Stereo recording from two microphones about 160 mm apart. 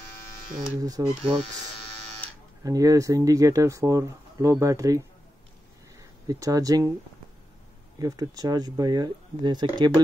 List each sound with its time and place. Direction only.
0.7 s speech: 20° right (ahead or behind)
2.6 s speech: 20° right (ahead or behind)
8.0 s speech: 25° right (ahead or behind)